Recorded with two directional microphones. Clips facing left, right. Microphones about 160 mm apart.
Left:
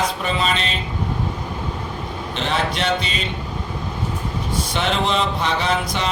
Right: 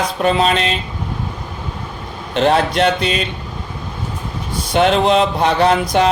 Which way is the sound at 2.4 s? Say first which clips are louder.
Right 9 dB; 50° right (ahead or behind).